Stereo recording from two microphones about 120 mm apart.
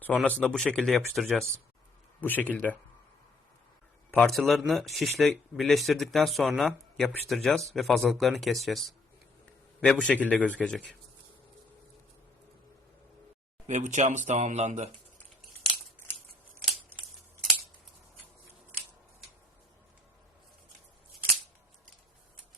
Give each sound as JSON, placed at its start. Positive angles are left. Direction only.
{"t": 0.0, "sound": "speech", "side_deg": 10}
{"t": 2.2, "sound": "a man's voice", "side_deg": 15}
{"t": 4.1, "sound": "a man's voice", "side_deg": 0}
{"t": 13.7, "sound": "speech", "side_deg": -80}
{"t": 16.6, "sound": "a sound", "side_deg": 0}